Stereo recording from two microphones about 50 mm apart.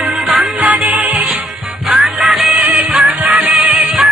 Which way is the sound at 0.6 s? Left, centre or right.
Right.